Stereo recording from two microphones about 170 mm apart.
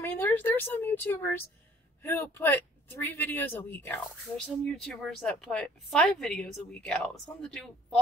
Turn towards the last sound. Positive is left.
turn(degrees=5)  # may be behind; listen again after turning